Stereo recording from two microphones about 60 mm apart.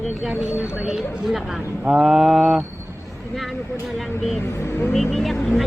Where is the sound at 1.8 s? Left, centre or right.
Centre.